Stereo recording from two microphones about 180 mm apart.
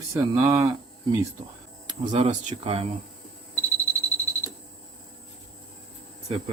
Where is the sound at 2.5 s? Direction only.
30° right (ahead or behind).